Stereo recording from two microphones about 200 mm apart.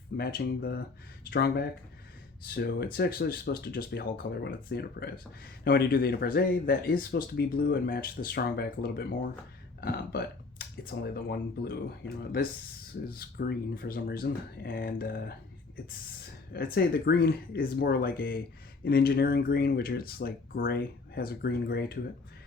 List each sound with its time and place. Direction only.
0.2 s speech: 50° left (ahead or behind)
13.1 s speech: 50° left (ahead or behind)
16.5 s speech: 50° left (ahead or behind)